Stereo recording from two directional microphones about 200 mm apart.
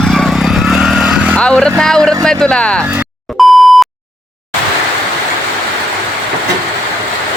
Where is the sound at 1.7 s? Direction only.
5° left (ahead or behind).